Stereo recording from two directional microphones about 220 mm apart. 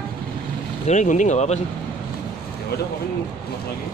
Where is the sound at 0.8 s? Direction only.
35° left (ahead or behind).